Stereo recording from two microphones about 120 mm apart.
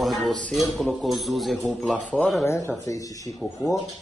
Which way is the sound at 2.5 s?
25° left (ahead or behind).